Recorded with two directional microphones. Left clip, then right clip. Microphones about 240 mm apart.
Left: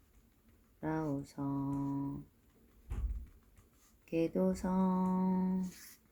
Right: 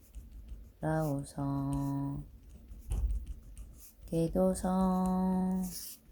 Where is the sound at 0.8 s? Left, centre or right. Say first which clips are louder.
Right 4 dB; centre.